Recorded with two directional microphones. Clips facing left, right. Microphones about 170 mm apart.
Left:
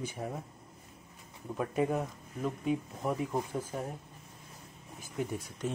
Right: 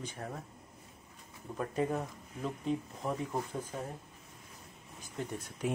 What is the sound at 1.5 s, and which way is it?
Speech, 10° left (ahead or behind).